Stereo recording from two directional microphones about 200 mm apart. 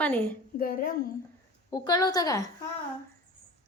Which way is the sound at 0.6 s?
45° left (ahead or behind).